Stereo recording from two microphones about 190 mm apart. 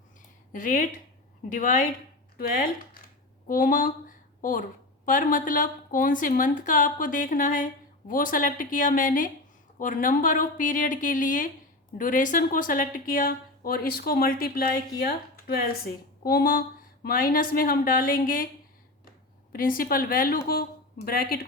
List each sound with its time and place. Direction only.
0.5 s a woman's voice: 45° left (ahead or behind)
4.4 s a sound: 45° left (ahead or behind)
5.0 s a woman's voice: 45° left (ahead or behind)
19.5 s a woman's voice: 50° left (ahead or behind)